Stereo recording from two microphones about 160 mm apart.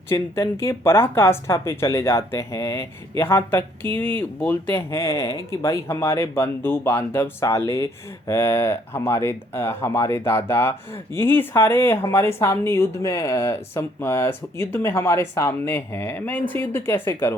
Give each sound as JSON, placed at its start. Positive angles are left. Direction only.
{"t": 0.1, "sound": "speech", "side_deg": 15}